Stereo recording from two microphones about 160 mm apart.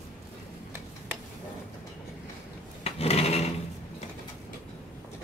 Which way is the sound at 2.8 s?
40° left (ahead or behind).